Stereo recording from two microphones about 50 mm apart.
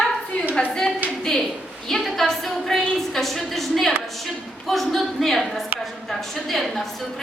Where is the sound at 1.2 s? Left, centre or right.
Centre.